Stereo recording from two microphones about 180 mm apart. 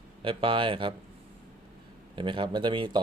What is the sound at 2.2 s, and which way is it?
Speech, 25° right (ahead or behind).